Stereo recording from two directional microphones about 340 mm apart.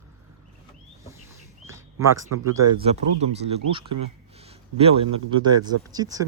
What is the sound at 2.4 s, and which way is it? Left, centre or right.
A man's voice, centre.